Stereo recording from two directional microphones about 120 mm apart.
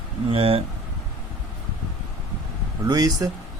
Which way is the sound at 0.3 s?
55° right (ahead or behind).